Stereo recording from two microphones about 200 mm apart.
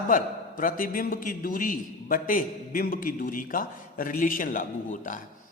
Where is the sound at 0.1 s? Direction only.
45° left (ahead or behind).